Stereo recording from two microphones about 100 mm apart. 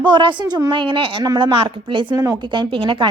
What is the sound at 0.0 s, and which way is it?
A woman's voice, 55° right (ahead or behind).